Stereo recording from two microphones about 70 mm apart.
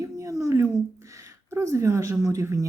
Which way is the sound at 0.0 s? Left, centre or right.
Right.